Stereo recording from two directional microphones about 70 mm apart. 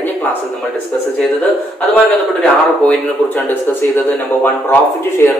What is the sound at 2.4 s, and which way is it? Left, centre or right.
Speech, left.